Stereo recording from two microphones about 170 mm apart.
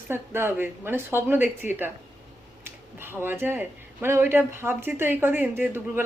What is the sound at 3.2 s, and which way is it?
Speech, 10° right (ahead or behind).